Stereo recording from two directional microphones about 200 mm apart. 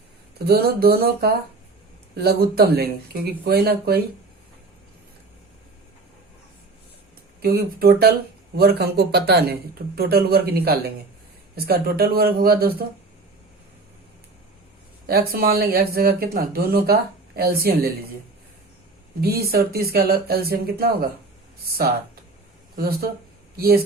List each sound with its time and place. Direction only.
0.4 s speech: 50° right (ahead or behind)
7.4 s speech: 50° right (ahead or behind)
15.0 s speech: 50° right (ahead or behind)
19.2 s speech: 50° right (ahead or behind)